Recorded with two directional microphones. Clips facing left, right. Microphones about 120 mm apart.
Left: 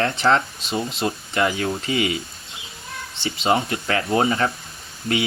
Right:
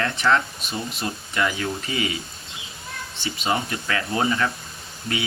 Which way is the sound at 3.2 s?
25° left (ahead or behind).